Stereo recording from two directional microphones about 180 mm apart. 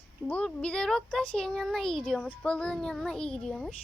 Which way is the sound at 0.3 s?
5° left (ahead or behind).